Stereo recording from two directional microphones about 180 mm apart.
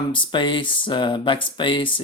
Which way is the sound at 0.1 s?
25° left (ahead or behind).